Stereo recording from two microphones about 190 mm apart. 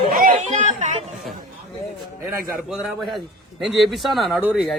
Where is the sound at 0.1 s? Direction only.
45° right (ahead or behind).